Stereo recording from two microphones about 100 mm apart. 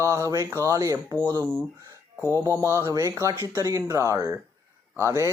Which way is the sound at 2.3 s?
30° right (ahead or behind).